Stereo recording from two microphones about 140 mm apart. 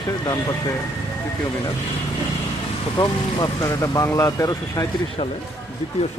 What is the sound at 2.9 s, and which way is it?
Speech, 25° left (ahead or behind).